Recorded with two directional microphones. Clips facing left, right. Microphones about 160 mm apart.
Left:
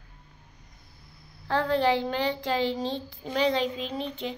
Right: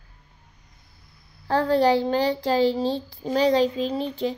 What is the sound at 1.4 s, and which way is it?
A woman's voice, 40° right (ahead or behind).